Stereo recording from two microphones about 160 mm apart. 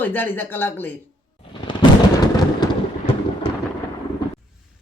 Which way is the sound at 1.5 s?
30° left (ahead or behind).